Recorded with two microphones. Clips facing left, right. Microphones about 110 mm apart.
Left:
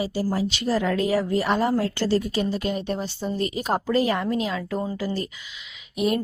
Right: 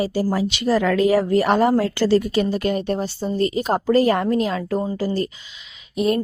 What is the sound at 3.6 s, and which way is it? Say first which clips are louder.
Speech: right 4 dB; 25° right (ahead or behind).